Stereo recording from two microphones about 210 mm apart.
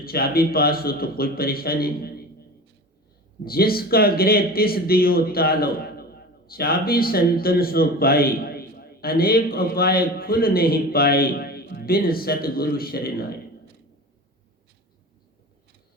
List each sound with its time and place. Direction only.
0.0 s speech: 45° left (ahead or behind)
3.4 s speech: 45° left (ahead or behind)